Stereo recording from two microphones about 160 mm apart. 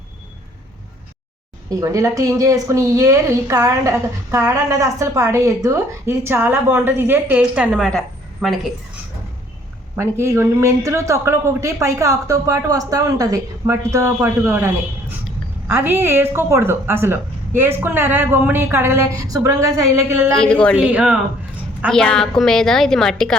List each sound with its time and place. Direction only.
1.7 s a woman's voice: 20° right (ahead or behind); by 8.6 s centre (ahead or behind)
10.0 s a woman's voice: 15° right (ahead or behind)
20.3 s a woman's voice: 5° left (ahead or behind)
20.7 s a woman's voice: 10° right (ahead or behind)
21.8 s a woman's voice: 5° left (ahead or behind)